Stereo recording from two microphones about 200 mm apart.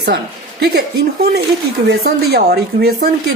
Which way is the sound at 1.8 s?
50° right (ahead or behind).